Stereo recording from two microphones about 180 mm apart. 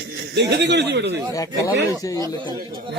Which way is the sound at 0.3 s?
70° right (ahead or behind).